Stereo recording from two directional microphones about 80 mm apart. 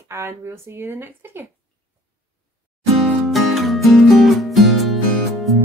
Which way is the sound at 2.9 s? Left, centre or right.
Centre.